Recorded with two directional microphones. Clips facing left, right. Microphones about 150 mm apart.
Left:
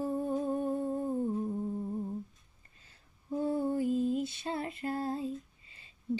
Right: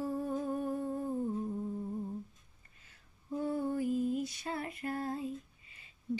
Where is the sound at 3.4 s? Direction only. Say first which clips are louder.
Left 3 dB; 30° left (ahead or behind).